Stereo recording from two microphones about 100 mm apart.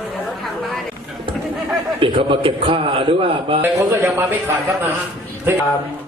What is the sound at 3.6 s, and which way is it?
Speech, 20° right (ahead or behind).